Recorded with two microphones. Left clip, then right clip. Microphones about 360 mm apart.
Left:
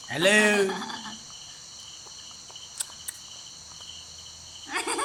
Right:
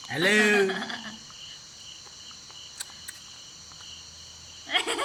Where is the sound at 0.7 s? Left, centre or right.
Left.